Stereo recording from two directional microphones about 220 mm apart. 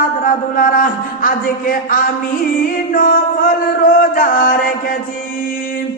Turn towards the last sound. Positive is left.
turn(degrees=40)  # may be behind; listen again after turning